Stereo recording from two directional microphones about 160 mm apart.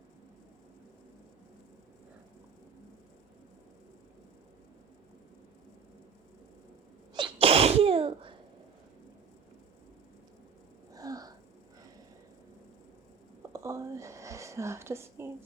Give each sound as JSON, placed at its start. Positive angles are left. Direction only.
{"t": 7.1, "sound": "sneeze", "side_deg": -30}
{"t": 10.9, "sound": "sneeze", "side_deg": -20}
{"t": 13.5, "sound": "a sound", "side_deg": -20}